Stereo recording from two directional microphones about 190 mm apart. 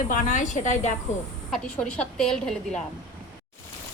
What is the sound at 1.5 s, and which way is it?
A woman's voice, 5° left (ahead or behind).